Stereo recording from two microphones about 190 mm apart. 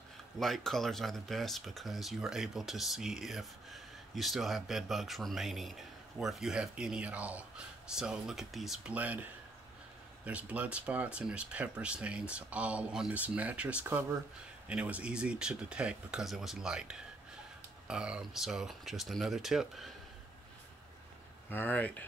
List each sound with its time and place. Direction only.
0.4 s speech: centre (ahead or behind)
10.2 s speech: 5° right (ahead or behind)
21.5 s speech: 10° left (ahead or behind)